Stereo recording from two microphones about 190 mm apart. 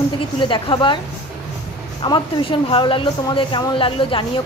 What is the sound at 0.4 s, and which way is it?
Speech, 25° left (ahead or behind).